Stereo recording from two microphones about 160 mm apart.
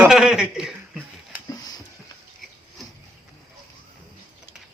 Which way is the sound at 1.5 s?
20° left (ahead or behind).